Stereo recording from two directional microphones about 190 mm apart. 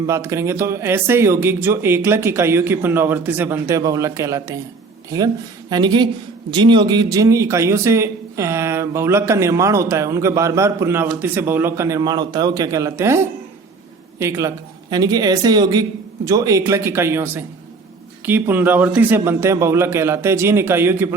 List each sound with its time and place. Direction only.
0.0 s a man's voice: 15° right (ahead or behind)
5.7 s a man's voice: 25° right (ahead or behind)